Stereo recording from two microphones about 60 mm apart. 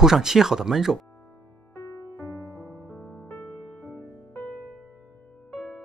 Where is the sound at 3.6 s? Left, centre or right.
Centre.